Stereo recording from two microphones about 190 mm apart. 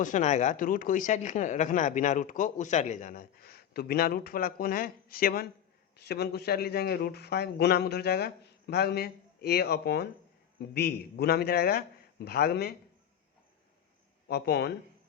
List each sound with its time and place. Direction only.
0.0 s a man's voice: 40° left (ahead or behind); by 12.7 s 55° left (ahead or behind)
14.3 s a man's voice: 60° left (ahead or behind)